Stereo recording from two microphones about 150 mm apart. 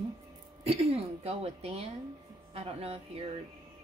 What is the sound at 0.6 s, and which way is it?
A woman's voice, 40° right (ahead or behind).